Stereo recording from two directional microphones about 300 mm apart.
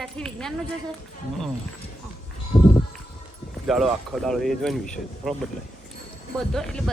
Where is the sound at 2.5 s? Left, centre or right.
Centre.